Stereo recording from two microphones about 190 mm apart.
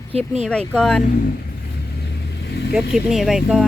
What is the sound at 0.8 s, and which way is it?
Speech, 5° left (ahead or behind).